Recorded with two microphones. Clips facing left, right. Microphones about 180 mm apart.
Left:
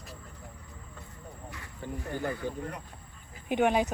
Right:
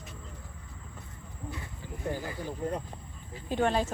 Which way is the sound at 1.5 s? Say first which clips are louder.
Left 5 dB; 20° right (ahead or behind).